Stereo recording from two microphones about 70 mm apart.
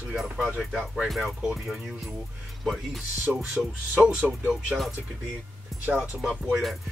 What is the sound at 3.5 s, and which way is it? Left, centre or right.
Speech, centre.